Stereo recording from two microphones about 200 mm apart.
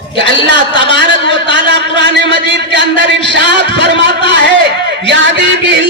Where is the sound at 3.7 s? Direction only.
60° right (ahead or behind).